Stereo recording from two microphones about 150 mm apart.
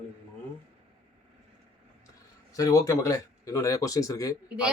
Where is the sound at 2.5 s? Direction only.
20° left (ahead or behind).